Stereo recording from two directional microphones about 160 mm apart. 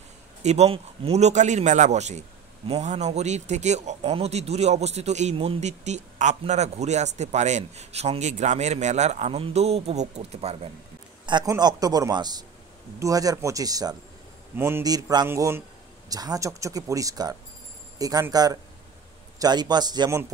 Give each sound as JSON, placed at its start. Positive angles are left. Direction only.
{"t": 0.4, "sound": "a man's voice", "side_deg": -40}
{"t": 11.2, "sound": "speech", "side_deg": -25}